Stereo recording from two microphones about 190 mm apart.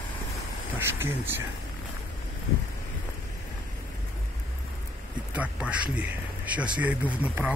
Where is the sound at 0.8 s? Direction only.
15° right (ahead or behind).